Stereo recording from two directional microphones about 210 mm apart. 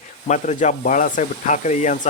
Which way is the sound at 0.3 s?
35° left (ahead or behind).